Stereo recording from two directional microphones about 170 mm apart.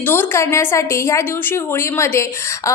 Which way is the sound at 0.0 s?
15° left (ahead or behind).